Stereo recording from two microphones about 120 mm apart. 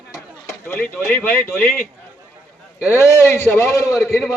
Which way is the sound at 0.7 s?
15° left (ahead or behind).